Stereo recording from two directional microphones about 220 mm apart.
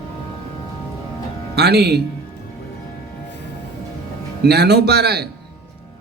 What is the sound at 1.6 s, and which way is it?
Speech, 45° right (ahead or behind).